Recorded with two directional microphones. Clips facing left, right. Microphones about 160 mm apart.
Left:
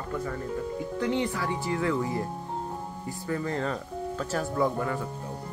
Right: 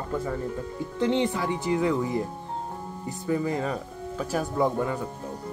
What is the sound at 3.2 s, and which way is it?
Speech, 15° right (ahead or behind).